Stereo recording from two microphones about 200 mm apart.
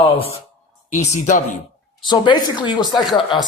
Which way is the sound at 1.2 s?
40° left (ahead or behind).